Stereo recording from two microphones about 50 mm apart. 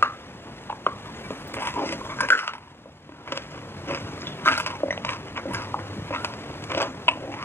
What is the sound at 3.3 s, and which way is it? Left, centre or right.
Biting, left.